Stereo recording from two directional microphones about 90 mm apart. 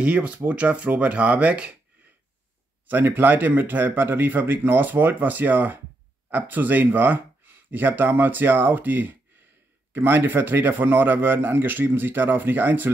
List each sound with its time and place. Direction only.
0.0 s speech: 15° right (ahead or behind)
2.9 s a man's voice: 20° right (ahead or behind)